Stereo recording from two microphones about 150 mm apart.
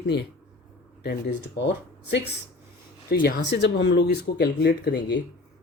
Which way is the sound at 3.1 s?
85° left.